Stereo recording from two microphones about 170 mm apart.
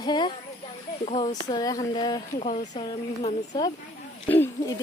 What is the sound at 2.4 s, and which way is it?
Speech, 40° left (ahead or behind).